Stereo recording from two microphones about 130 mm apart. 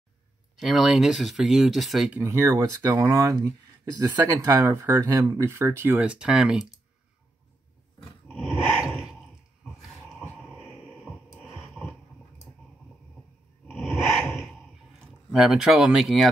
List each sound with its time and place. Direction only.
0.6 s speech: centre (ahead or behind)
8.3 s dog: 5° right (ahead or behind)
8.7 s a sound: 5° right (ahead or behind)
11.1 s music: 10° right (ahead or behind)
13.7 s a sound: centre (ahead or behind)
15.3 s speech: 5° right (ahead or behind)